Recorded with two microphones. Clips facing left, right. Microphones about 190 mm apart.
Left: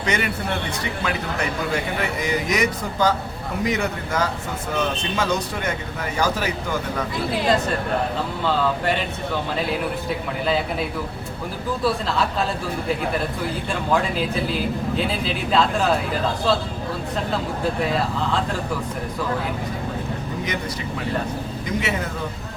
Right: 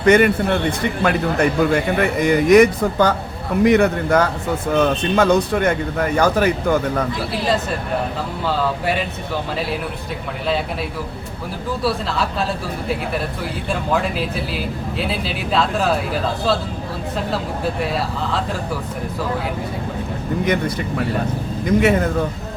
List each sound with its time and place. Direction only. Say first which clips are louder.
0.0 s a man's voice: right 11 dB; 55° right (ahead or behind)
11.8 s a man's voice: right 1 dB; centre (ahead or behind)
13.9 s a man's voice: left 1 dB; 5° right (ahead or behind)
20.4 s a man's voice: right 11 dB; 55° right (ahead or behind)
21.8 s speech: right 10 dB; 50° right (ahead or behind)